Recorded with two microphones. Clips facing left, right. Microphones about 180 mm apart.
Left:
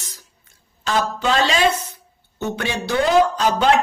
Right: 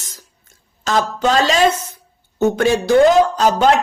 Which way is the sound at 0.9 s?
45° right (ahead or behind).